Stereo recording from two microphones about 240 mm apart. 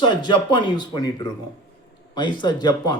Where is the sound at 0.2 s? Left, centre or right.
Centre.